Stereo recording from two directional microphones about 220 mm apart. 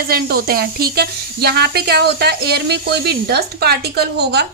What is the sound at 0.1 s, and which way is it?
Speech, 45° right (ahead or behind).